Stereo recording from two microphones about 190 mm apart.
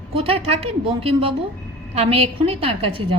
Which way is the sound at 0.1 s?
30° right (ahead or behind).